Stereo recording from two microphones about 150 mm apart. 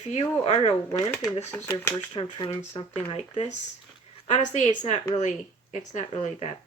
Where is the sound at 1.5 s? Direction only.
15° left (ahead or behind).